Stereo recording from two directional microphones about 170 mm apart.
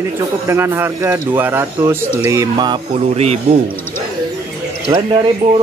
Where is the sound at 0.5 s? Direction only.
15° right (ahead or behind).